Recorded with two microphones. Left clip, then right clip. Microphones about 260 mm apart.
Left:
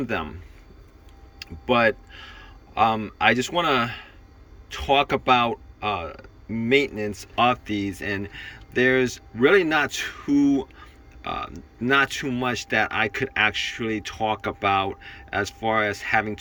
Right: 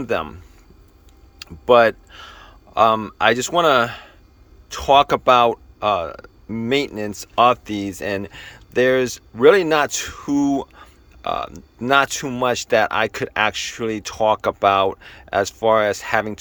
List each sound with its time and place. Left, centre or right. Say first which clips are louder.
0.0 s speech: right 5 dB; centre
1.4 s speech: right 8 dB; centre